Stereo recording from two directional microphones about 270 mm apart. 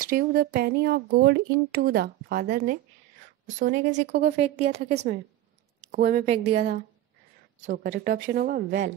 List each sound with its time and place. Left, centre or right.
0.0 s a woman's voice: right
7.6 s speech: right